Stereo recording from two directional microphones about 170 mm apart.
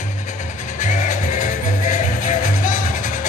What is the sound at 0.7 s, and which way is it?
Music, 45° left (ahead or behind).